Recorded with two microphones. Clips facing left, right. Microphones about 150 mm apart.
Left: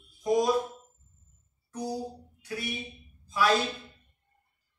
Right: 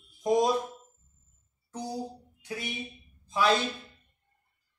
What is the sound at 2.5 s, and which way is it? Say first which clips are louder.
Speech: left 1 dB; 20° right (ahead or behind).